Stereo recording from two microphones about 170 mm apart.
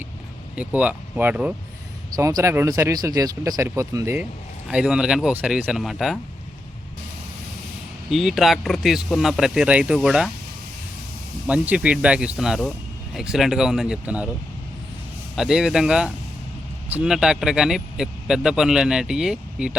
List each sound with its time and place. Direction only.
0.5 s speech: 10° right (ahead or behind)
2.1 s speech: 20° right (ahead or behind); by 6.1 s centre (ahead or behind)
8.1 s speech: centre (ahead or behind)
11.4 s speech: 10° right (ahead or behind)
15.4 s speech: 5° right (ahead or behind)